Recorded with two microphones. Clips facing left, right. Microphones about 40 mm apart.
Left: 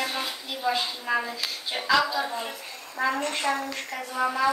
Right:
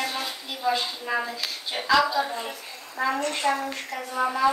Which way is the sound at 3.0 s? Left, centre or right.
Right.